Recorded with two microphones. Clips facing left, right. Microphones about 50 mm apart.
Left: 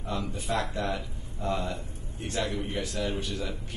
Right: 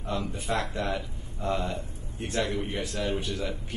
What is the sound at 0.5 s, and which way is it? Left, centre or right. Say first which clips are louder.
Speech: even; right.